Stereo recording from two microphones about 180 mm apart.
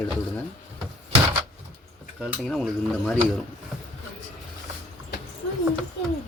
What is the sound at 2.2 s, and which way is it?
Speech, 5° left (ahead or behind).